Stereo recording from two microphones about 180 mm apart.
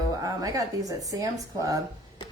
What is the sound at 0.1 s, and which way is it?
A woman's voice, 20° right (ahead or behind).